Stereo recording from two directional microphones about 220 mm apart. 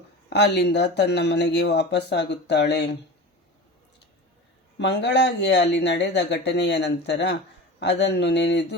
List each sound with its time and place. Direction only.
0.3 s speech: 50° left (ahead or behind)
4.8 s speech: 50° left (ahead or behind)